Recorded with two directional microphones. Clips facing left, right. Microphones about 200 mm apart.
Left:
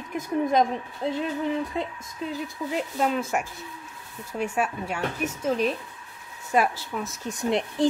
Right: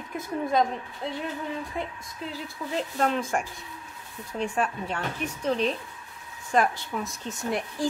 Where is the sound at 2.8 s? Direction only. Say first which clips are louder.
Even; 5° left (ahead or behind).